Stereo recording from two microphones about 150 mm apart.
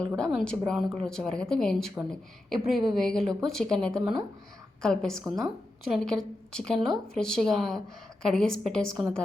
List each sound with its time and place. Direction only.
0.2 s a woman's voice: centre (ahead or behind)